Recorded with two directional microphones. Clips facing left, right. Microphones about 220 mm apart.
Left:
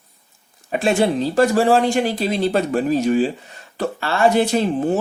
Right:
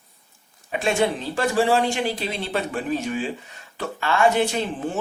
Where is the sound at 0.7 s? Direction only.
35° left (ahead or behind).